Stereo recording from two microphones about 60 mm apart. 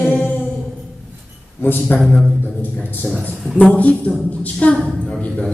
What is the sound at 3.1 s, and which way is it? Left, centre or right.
A man's voice, left.